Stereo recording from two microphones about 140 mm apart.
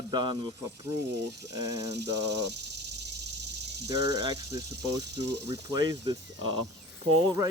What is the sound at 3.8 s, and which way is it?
Speech, 25° right (ahead or behind).